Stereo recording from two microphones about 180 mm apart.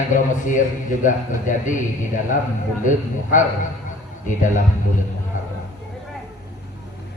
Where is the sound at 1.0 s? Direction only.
45° left (ahead or behind).